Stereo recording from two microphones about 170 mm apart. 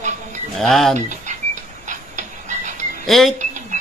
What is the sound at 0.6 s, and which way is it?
Speech, centre (ahead or behind).